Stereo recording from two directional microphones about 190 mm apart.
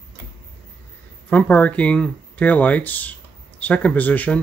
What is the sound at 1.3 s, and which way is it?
Speech, 5° left (ahead or behind).